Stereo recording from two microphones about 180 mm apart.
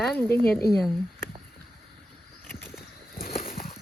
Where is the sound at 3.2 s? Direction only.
55° left (ahead or behind).